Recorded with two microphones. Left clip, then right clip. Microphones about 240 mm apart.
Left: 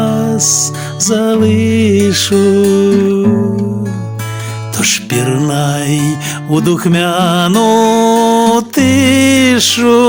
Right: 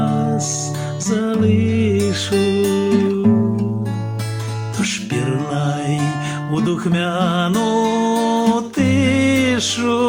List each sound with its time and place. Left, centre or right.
0.0 s music: left
4.8 s music: left